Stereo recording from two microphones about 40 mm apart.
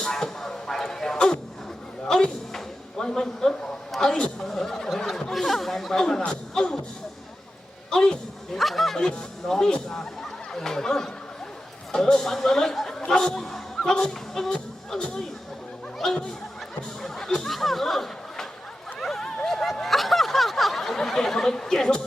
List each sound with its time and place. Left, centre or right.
0.0 s music: centre
2.0 s a sound: centre
3.0 s speech: centre
7.9 s a woman's voice: centre
8.5 s speech: centre
9.0 s speech: centre
14.9 s speech: left
16.0 s speech: centre
17.0 s chatter: centre
18.9 s a sound: centre